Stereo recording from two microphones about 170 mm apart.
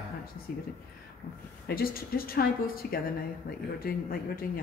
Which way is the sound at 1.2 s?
40° left (ahead or behind).